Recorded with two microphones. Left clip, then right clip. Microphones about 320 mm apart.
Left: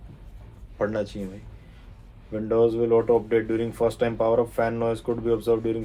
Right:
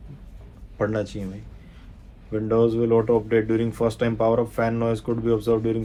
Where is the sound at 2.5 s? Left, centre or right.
Right.